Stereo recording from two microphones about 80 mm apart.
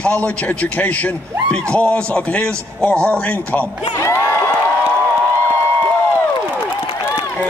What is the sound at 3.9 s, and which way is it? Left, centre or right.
Speech, left.